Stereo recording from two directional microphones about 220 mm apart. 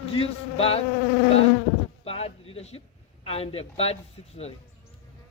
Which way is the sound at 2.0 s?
25° left (ahead or behind).